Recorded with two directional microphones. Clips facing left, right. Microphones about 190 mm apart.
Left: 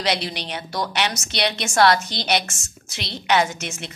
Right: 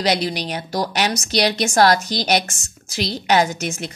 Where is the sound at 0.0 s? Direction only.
40° right (ahead or behind).